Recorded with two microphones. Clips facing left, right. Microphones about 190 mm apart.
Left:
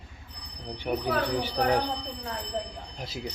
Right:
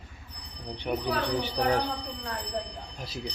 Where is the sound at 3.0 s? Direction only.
25° left (ahead or behind).